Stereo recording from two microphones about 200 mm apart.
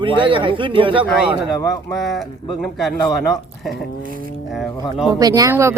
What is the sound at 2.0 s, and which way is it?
Speech, centre (ahead or behind).